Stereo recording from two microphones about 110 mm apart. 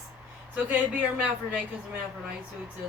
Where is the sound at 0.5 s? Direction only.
15° right (ahead or behind).